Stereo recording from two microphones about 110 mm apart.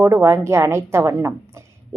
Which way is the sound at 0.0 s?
25° right (ahead or behind).